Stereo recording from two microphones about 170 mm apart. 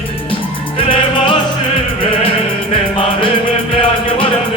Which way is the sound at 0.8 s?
30° left (ahead or behind).